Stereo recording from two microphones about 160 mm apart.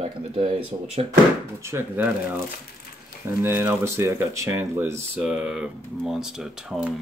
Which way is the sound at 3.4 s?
15° right (ahead or behind).